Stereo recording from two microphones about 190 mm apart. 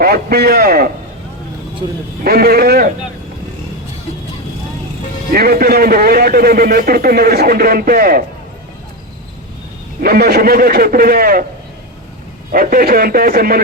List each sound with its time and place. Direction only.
0.0 s a man's voice: 55° right (ahead or behind)
2.2 s a man's voice: 55° right (ahead or behind)
5.3 s a man's voice: 50° right (ahead or behind)
10.0 s a man's voice: 55° right (ahead or behind)
12.5 s a man's voice: 50° right (ahead or behind)